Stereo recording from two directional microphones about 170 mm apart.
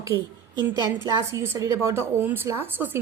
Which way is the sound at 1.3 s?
15° right (ahead or behind).